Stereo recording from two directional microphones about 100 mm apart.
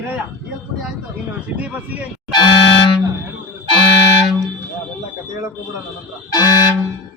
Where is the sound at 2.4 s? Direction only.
50° left (ahead or behind).